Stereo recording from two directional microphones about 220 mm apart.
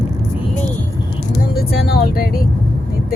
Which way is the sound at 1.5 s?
45° left (ahead or behind).